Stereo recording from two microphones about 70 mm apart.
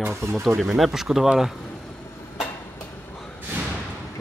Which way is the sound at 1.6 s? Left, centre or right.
Centre.